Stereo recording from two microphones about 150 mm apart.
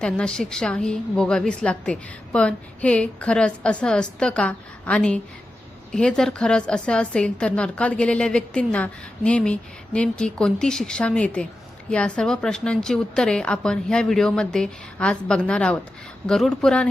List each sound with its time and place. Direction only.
0.0 s a woman's voice: 5° left (ahead or behind)